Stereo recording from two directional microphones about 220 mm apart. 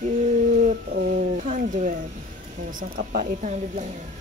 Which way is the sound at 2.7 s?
40° right (ahead or behind).